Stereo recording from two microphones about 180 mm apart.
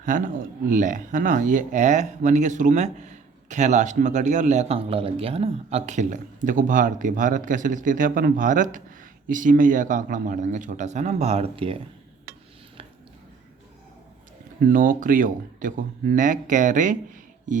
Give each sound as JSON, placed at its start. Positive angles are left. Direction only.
{"t": 0.0, "sound": "speech", "side_deg": -45}
{"t": 14.6, "sound": "speech", "side_deg": -50}